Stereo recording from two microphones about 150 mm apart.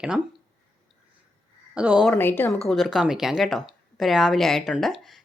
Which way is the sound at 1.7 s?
5° right (ahead or behind).